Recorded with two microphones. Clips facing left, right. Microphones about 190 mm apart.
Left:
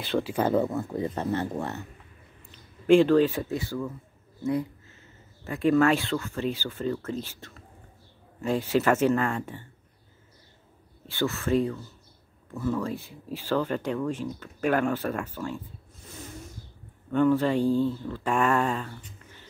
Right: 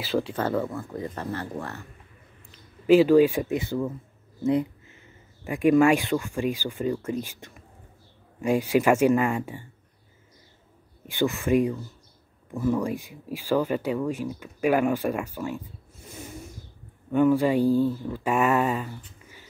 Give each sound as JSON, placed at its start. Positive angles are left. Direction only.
{"t": 0.0, "sound": "speech", "side_deg": 0}
{"t": 0.4, "sound": "speech", "side_deg": 20}
{"t": 2.5, "sound": "speech", "side_deg": -5}
{"t": 11.1, "sound": "speech", "side_deg": -15}
{"t": 17.1, "sound": "speech", "side_deg": -10}